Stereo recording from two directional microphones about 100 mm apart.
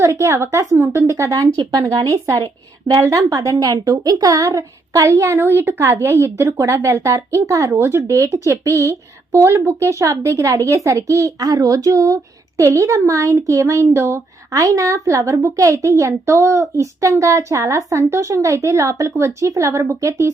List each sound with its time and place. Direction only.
0.0 s a woman's voice: 30° right (ahead or behind)